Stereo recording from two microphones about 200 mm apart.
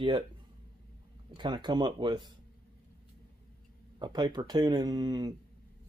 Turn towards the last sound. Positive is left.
turn(degrees=-20)  # may be behind; listen again after turning